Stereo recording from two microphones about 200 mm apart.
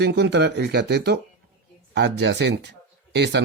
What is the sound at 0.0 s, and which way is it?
Speech, 55° right (ahead or behind).